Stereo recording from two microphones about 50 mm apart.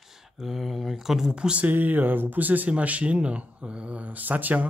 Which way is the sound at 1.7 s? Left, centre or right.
Right.